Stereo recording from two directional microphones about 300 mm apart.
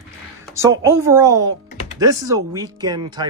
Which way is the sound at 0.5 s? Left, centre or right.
Centre.